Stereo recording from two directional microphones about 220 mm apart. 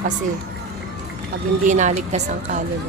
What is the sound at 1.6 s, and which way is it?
Speech, 35° right (ahead or behind).